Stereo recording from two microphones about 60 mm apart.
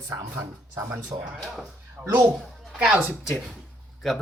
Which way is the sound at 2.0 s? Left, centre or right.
Right.